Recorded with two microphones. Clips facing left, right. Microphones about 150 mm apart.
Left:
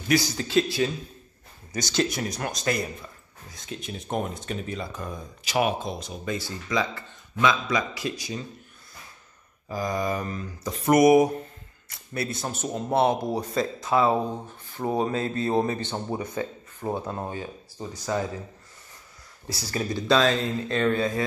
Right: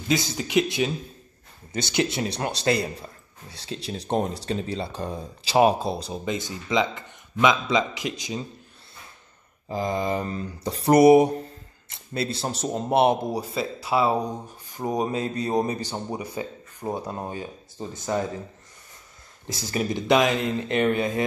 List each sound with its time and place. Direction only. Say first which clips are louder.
0.1 s a man's voice: even; 20° right (ahead or behind)
2.0 s speech: right 1 dB; 25° right (ahead or behind)
6.2 s a man's voice: left 1 dB; 20° right (ahead or behind)
9.7 s a man's voice: right 2 dB; 25° right (ahead or behind)
13.6 s a man's voice: left 1 dB; 10° right (ahead or behind)
19.4 s a man's voice: right 3 dB; 20° right (ahead or behind)